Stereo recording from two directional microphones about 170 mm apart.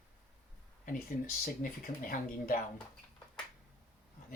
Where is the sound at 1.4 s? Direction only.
50° left (ahead or behind).